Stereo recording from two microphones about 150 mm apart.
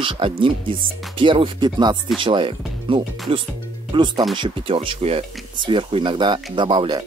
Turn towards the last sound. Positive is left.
turn(degrees=-30)  # may be behind; listen again after turning